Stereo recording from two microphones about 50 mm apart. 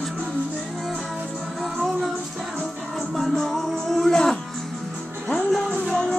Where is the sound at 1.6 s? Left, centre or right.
Centre.